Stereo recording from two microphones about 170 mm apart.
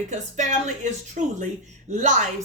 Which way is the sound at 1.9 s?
45° right (ahead or behind).